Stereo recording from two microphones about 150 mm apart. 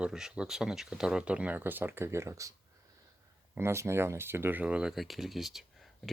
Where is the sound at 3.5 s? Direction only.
15° right (ahead or behind).